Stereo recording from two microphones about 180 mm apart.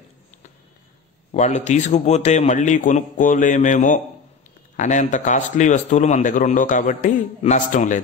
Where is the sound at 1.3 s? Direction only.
40° left (ahead or behind).